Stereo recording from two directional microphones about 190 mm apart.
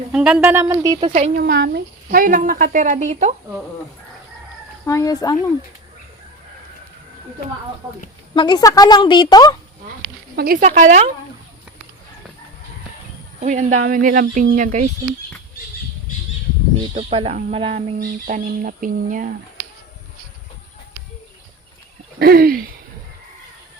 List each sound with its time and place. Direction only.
0.1 s a woman's voice: 5° right (ahead or behind)
1.4 s speech: 60° right (ahead or behind); by 3.3 s 40° right (ahead or behind)
4.9 s speech: 20° left (ahead or behind)
8.4 s a woman's voice: 20° left (ahead or behind)
10.3 s speech: 55° right (ahead or behind)
10.6 s speech: 40° right (ahead or behind)
13.4 s speech: 40° right (ahead or behind)
16.9 s speech: 30° right (ahead or behind)
18.0 s speech: 45° right (ahead or behind)
22.2 s speech: 50° right (ahead or behind)